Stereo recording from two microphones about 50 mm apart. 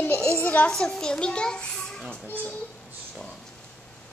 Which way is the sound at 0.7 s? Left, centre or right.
Centre.